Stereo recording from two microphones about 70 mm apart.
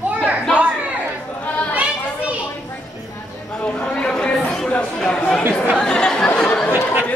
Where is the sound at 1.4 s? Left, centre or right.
Left.